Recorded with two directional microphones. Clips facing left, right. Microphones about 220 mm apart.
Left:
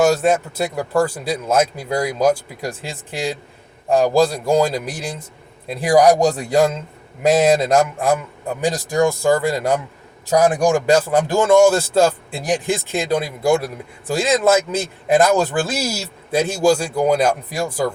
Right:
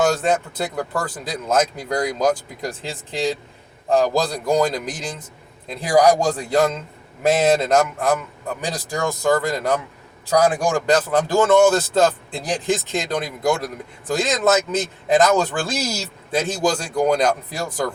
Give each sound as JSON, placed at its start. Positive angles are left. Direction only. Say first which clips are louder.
{"t": 0.0, "sound": "speech", "louder": "left 3 dB", "side_deg": 10}